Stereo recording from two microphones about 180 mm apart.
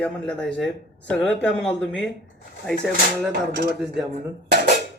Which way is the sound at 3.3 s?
65° right (ahead or behind).